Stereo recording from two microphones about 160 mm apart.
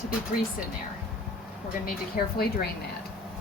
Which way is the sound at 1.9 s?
70° left (ahead or behind).